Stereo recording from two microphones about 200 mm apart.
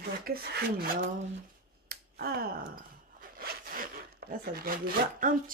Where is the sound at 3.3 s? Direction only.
45° right (ahead or behind).